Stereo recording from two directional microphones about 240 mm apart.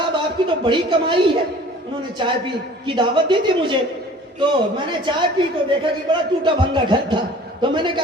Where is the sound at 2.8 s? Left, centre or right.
Centre.